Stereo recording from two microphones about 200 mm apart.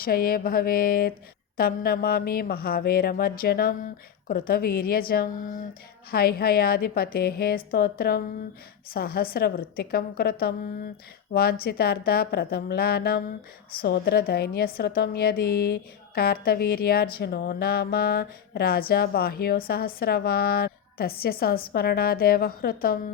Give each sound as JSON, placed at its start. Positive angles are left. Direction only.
{"t": 0.0, "sound": "a woman's voice", "side_deg": 45}